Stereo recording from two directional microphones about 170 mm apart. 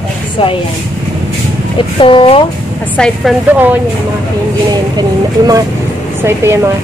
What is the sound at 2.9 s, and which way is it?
Speech, 5° left (ahead or behind).